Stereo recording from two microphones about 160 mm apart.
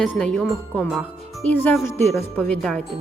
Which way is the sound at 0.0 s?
5° left (ahead or behind).